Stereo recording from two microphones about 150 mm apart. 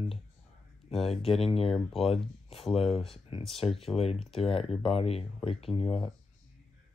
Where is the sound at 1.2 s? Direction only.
40° left (ahead or behind).